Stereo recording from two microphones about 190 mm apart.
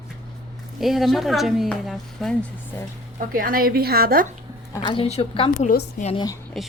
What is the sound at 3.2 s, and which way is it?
A woman's voice, 50° right (ahead or behind).